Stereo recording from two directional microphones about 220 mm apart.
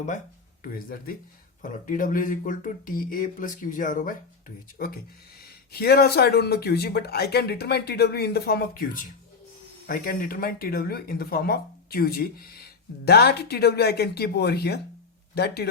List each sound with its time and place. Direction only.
0.6 s speech: 40° left (ahead or behind)